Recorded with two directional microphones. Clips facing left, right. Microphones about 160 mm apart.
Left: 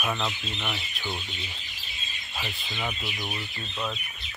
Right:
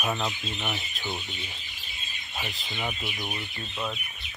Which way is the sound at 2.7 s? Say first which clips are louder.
Even; 15° right (ahead or behind).